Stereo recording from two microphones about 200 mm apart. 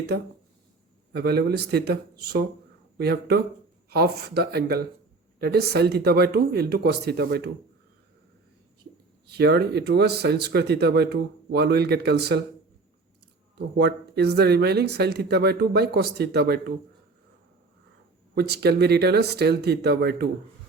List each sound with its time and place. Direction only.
1.1 s speech: 55° right (ahead or behind)
9.3 s speech: 55° right (ahead or behind)
13.6 s speech: 55° right (ahead or behind)
18.3 s speech: 55° right (ahead or behind)